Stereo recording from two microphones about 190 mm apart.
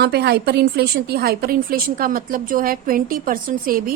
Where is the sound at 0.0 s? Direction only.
60° right (ahead or behind).